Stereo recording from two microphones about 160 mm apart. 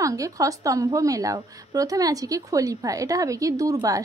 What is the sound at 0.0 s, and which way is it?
A woman's voice, 20° right (ahead or behind).